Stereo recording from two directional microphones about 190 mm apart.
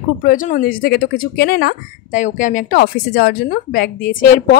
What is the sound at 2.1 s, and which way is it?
A woman's voice, 40° left (ahead or behind).